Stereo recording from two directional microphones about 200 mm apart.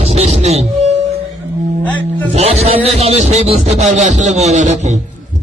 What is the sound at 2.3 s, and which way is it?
Music, 30° right (ahead or behind).